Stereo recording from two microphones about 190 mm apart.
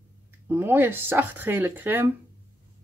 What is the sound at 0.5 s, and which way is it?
Speech, 10° right (ahead or behind).